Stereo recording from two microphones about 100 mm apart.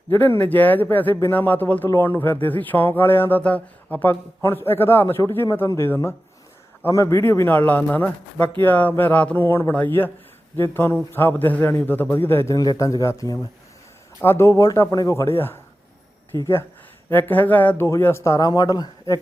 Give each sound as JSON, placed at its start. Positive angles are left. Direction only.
{"t": 0.2, "sound": "speech", "side_deg": 20}
{"t": 12.5, "sound": "speech", "side_deg": 40}
{"t": 17.1, "sound": "speech", "side_deg": 20}
{"t": 18.4, "sound": "speech", "side_deg": 40}